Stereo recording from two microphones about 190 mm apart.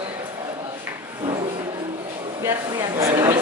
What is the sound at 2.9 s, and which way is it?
Speech, 20° right (ahead or behind).